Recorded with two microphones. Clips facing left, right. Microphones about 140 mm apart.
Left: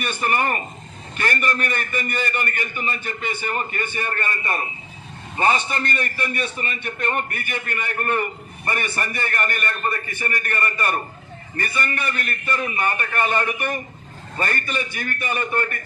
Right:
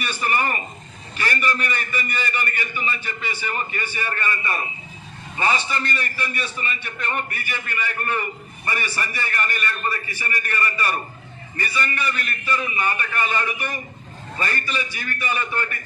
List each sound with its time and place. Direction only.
0.0 s a man's voice: 50° left (ahead or behind)